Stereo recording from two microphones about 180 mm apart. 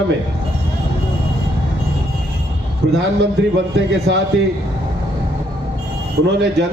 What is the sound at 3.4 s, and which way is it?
Speech, 75° right (ahead or behind).